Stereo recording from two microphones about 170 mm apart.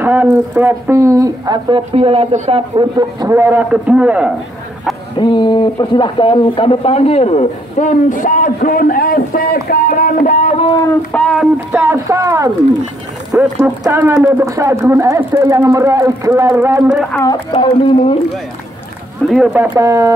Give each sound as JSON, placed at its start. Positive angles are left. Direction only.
{"t": 0.0, "sound": "speech", "side_deg": -10}
{"t": 2.0, "sound": "speech", "side_deg": -35}
{"t": 2.7, "sound": "speech", "side_deg": -25}
{"t": 5.1, "sound": "speech", "side_deg": 25}
{"t": 10.9, "sound": "speech", "side_deg": 5}
{"t": 11.7, "sound": "speech", "side_deg": -15}
{"t": 13.6, "sound": "speech", "side_deg": -15}
{"t": 17.1, "sound": "speech", "side_deg": 20}
{"t": 17.5, "sound": "speech", "side_deg": 30}
{"t": 19.2, "sound": "speech", "side_deg": 0}
{"t": 19.5, "sound": "speech", "side_deg": -10}